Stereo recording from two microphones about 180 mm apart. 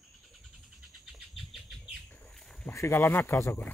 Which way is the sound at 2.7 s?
15° left (ahead or behind).